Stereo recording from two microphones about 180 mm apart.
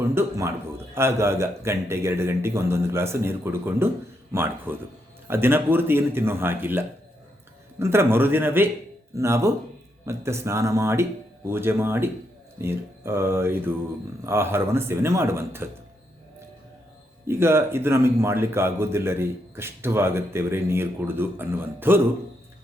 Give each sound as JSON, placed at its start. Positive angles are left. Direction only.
{"t": 0.0, "sound": "a sound", "side_deg": -15}
{"t": 0.9, "sound": "speech", "side_deg": -15}
{"t": 17.2, "sound": "speech", "side_deg": -15}